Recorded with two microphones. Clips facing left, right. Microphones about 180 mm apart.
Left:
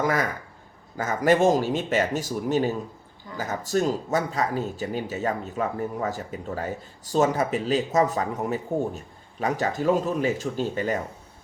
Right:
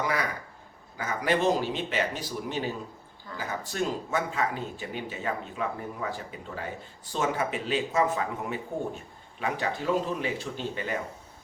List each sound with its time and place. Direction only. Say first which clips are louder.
0.0 s speech: left 5 dB; 45° left (ahead or behind)